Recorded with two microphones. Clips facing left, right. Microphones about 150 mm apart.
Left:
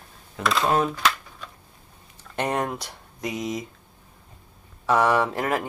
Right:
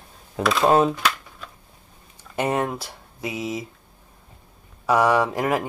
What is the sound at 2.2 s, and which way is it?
Speech, 5° right (ahead or behind).